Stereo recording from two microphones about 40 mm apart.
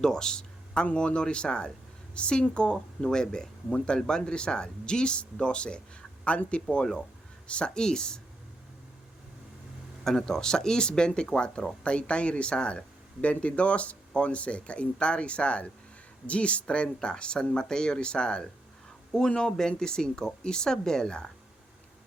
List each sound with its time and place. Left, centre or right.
0.0 s a sound: centre
0.9 s speech: left
7.7 s speech: centre
10.0 s speech: centre